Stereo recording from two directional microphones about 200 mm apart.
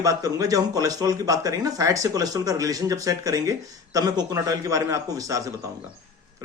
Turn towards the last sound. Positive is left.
turn(degrees=-15)  # may be behind; listen again after turning